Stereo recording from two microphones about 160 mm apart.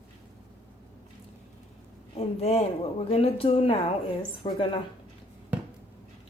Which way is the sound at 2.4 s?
40° left (ahead or behind).